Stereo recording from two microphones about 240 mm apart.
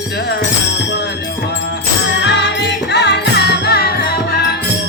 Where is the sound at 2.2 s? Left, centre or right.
Left.